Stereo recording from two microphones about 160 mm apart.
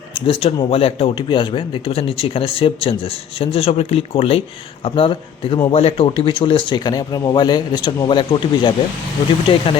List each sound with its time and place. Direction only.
0.3 s speech: 35° left (ahead or behind)